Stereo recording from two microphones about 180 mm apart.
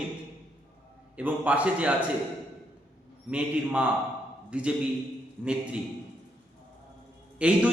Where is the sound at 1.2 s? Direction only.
10° right (ahead or behind).